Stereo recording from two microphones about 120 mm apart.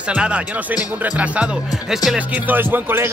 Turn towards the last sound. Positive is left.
turn(degrees=-15)  # may be behind; listen again after turning